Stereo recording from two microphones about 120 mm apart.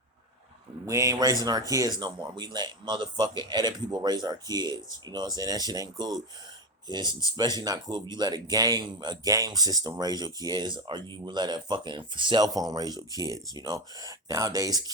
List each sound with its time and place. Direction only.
0.9 s speech: 30° right (ahead or behind)